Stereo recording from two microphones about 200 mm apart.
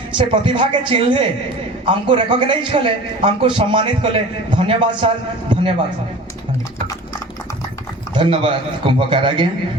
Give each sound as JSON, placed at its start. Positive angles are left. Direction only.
{"t": 0.2, "sound": "a man's voice", "side_deg": -25}
{"t": 8.1, "sound": "a man's voice", "side_deg": -25}